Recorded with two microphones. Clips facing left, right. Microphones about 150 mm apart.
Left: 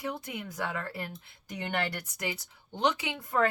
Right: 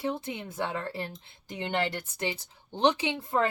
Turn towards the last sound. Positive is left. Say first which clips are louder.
# right 1 dB
turn(degrees=-25)  # may be behind; listen again after turning